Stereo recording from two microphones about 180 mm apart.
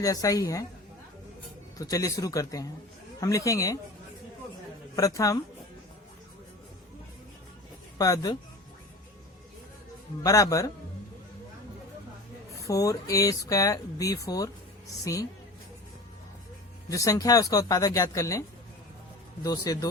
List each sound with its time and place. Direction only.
0.0 s speech: 20° left (ahead or behind)
1.8 s speech: 20° left (ahead or behind)
4.9 s speech: 20° left (ahead or behind)
7.9 s speech: 20° left (ahead or behind)
10.2 s speech: 20° left (ahead or behind)
12.5 s speech: 20° left (ahead or behind)
16.9 s speech: 20° left (ahead or behind)